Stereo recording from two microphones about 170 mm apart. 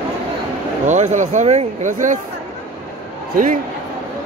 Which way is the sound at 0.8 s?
45° right (ahead or behind).